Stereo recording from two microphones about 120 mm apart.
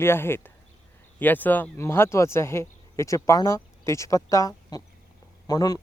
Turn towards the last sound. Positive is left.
turn(degrees=30)  # may be behind; listen again after turning